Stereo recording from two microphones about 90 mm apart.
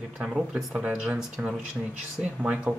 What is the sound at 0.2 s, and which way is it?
Speech, 15° right (ahead or behind).